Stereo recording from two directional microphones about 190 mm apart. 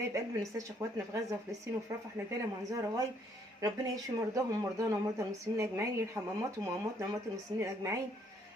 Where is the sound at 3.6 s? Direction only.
20° right (ahead or behind).